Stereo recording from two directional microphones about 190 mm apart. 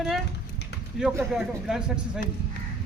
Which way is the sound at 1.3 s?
5° right (ahead or behind).